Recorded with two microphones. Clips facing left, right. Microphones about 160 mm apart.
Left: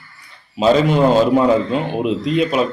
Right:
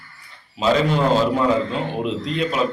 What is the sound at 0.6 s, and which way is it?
Speech, 20° left (ahead or behind).